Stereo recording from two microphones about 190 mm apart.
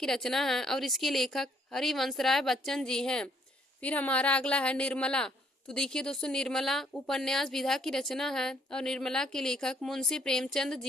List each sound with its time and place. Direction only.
0.0 s speech: centre (ahead or behind)